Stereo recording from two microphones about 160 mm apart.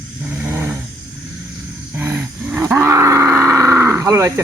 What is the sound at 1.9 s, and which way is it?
Wild animals, 15° right (ahead or behind).